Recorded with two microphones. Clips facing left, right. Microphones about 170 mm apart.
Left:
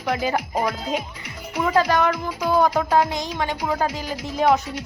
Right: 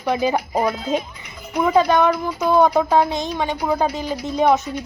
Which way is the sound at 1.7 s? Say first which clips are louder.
Right 3 dB; 20° right (ahead or behind).